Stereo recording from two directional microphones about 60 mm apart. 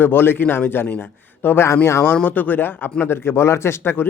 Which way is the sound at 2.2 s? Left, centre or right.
Left.